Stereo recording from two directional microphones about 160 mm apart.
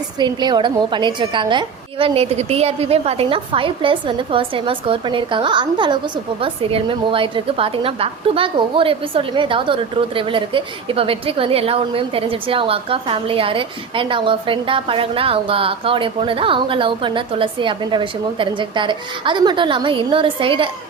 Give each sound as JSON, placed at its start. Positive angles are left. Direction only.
{"t": 0.2, "sound": "a woman's voice", "side_deg": -25}